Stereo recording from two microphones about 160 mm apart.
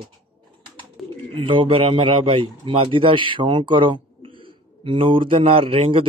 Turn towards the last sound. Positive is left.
turn(degrees=-35)  # may be behind; listen again after turning